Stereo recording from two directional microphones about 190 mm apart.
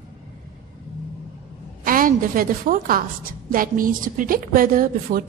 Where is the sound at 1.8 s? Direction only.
45° right (ahead or behind).